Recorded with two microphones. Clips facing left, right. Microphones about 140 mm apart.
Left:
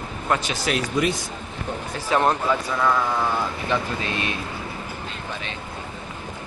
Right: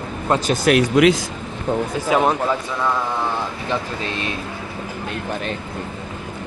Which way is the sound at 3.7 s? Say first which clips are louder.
Right 1 dB; 30° right (ahead or behind).